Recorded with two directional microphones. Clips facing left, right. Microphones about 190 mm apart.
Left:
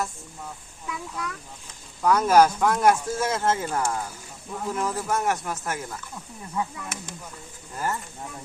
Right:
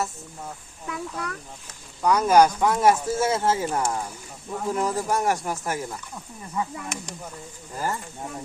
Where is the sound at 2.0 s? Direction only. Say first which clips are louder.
Even; 10° right (ahead or behind).